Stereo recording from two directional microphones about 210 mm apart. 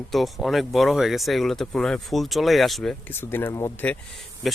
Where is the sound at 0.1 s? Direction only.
Centre (ahead or behind).